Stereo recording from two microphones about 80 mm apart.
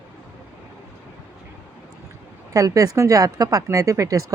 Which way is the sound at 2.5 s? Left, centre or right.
Right.